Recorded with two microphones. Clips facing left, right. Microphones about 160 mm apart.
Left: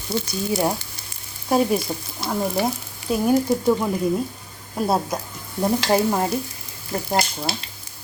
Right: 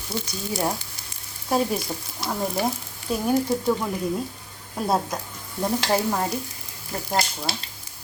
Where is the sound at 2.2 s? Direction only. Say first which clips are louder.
Left 3 dB; 5° left (ahead or behind).